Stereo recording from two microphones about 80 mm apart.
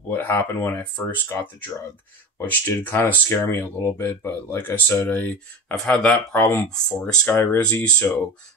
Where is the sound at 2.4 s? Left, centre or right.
Left.